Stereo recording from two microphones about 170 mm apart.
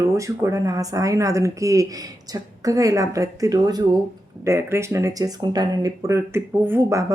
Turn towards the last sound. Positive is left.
turn(degrees=-15)  # may be behind; listen again after turning